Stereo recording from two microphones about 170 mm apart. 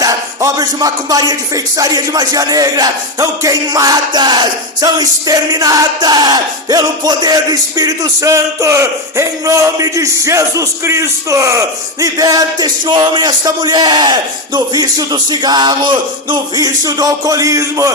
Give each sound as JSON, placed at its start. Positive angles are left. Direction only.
{"t": 0.0, "sound": "music", "side_deg": -20}